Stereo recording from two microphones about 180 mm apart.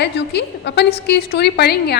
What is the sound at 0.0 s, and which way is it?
A woman's voice, 70° left (ahead or behind).